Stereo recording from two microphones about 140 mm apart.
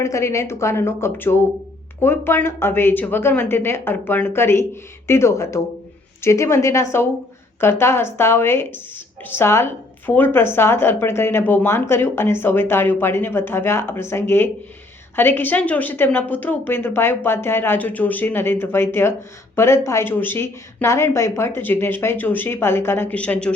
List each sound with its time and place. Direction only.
0.0 s a woman's voice: 20° left (ahead or behind)